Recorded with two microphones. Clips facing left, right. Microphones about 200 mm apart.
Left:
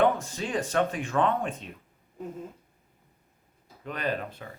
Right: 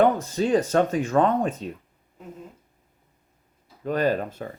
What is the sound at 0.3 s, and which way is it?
Speech, 40° right (ahead or behind).